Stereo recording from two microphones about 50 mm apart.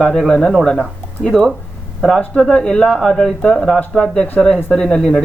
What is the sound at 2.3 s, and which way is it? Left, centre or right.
Speech, centre.